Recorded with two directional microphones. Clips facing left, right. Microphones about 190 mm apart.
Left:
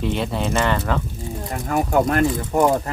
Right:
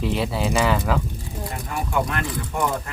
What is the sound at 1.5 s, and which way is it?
Speech, 45° left (ahead or behind).